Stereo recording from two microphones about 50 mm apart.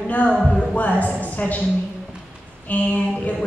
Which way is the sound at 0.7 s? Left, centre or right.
Left.